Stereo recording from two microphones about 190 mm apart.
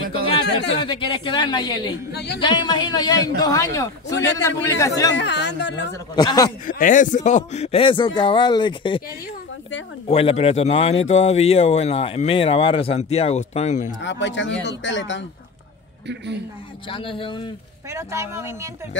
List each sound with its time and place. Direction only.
0.7 s a man's voice: 25° left (ahead or behind)
2.1 s speech: 60° left (ahead or behind)
2.4 s a man's voice: 25° left (ahead or behind)
5.1 s speech: 65° left (ahead or behind)
6.1 s a man's voice: 20° left (ahead or behind)
6.6 s a man's voice: 45° left (ahead or behind); by 9.0 s 25° left (ahead or behind)
10.0 s speech: 30° left (ahead or behind)
14.0 s speech: 70° left (ahead or behind)
16.9 s a man's voice: 25° left (ahead or behind)
17.9 s speech: 15° right (ahead or behind)